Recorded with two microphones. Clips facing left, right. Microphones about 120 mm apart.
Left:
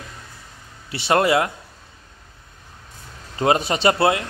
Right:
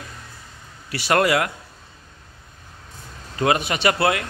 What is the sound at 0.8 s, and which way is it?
Speech, 20° left (ahead or behind).